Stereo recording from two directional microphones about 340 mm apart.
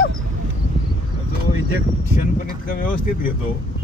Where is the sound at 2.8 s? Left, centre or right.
Left.